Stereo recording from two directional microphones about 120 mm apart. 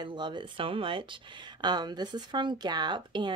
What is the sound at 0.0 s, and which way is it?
Speech, 40° right (ahead or behind).